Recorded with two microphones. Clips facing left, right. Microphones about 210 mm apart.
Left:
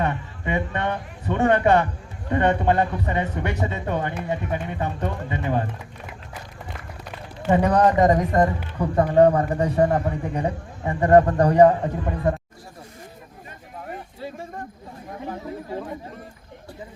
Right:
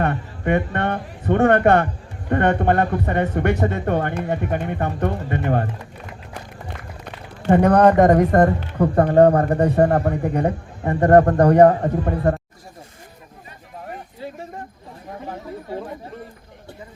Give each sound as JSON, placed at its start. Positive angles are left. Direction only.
{"t": 0.4, "sound": "speech", "side_deg": -55}
{"t": 7.5, "sound": "a man's voice", "side_deg": -60}